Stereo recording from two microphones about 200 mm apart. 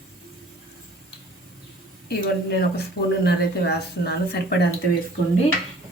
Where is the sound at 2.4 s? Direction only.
55° left (ahead or behind).